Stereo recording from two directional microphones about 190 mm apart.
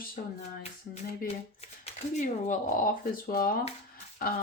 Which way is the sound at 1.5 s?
35° left (ahead or behind).